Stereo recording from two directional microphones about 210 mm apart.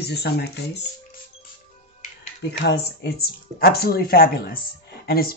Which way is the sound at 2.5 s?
50° left (ahead or behind).